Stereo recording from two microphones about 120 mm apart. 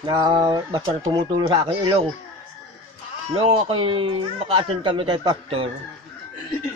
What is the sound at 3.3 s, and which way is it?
Speech, 50° right (ahead or behind).